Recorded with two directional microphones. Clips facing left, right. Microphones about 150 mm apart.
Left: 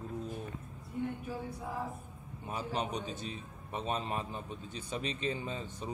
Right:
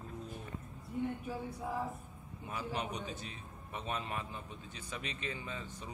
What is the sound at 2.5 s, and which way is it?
A man's voice, 25° left (ahead or behind).